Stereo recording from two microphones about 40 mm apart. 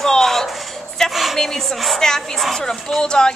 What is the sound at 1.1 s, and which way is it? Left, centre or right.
Speech, centre.